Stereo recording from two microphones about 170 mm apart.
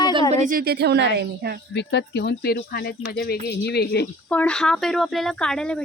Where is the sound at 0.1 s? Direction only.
30° right (ahead or behind).